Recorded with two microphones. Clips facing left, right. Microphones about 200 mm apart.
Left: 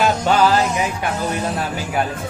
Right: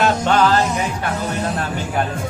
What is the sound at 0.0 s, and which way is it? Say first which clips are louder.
Music: even; 5° left (ahead or behind).